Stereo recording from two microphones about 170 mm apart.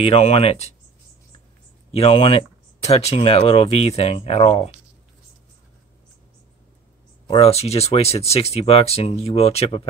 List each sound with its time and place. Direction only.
0.0 s speech: 35° left (ahead or behind)
1.9 s speech: 35° left (ahead or behind)
7.2 s speech: 35° left (ahead or behind)